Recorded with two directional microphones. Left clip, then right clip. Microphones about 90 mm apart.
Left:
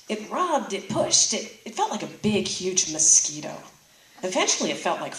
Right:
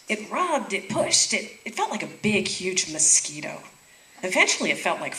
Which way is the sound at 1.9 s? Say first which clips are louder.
Right 1 dB; 80° left.